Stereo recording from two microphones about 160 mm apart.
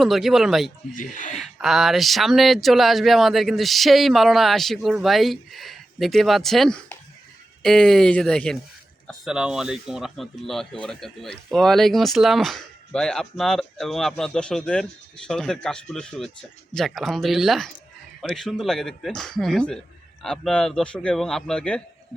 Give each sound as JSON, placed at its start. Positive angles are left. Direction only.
{"t": 0.0, "sound": "speech", "side_deg": 0}
{"t": 0.9, "sound": "speech", "side_deg": 55}
{"t": 1.5, "sound": "speech", "side_deg": 0}